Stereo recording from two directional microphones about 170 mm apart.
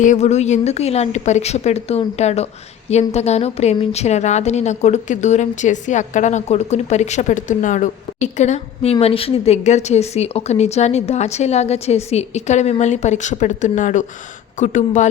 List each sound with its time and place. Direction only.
0.0 s a woman's voice: 45° left (ahead or behind)